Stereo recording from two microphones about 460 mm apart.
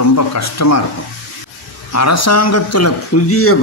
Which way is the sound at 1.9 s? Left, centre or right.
Left.